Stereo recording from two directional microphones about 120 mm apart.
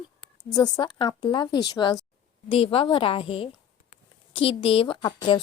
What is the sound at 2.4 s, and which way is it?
A woman's voice, 50° left (ahead or behind).